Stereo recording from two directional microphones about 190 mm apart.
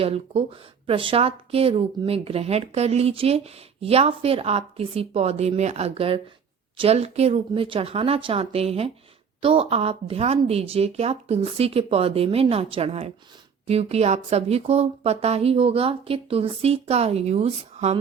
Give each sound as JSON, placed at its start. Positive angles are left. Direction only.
{"t": 0.0, "sound": "speech", "side_deg": -30}